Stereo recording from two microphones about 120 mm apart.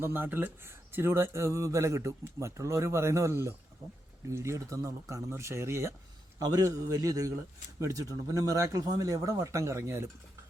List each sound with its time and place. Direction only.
0.0 s a man's voice: 20° right (ahead or behind)